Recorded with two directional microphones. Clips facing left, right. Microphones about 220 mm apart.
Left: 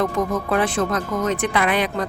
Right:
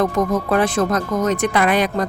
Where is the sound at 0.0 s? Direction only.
40° right (ahead or behind).